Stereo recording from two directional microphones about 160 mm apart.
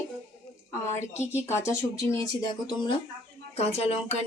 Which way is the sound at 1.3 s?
15° left (ahead or behind).